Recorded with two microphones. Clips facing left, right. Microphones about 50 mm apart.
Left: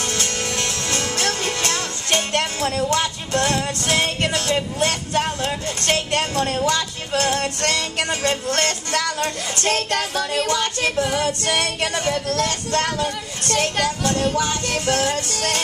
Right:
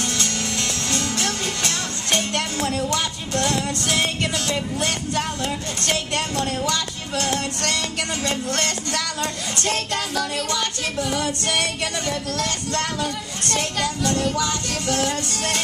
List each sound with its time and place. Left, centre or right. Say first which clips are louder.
0.0 s music: left 1 dB; left
12.1 s speech: left 4 dB; left
12.4 s music: left 3 dB; left